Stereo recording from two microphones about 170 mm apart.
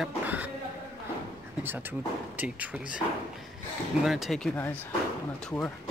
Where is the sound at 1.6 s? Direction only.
10° right (ahead or behind).